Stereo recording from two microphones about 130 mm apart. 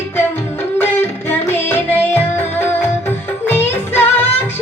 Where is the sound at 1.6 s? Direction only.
15° left (ahead or behind).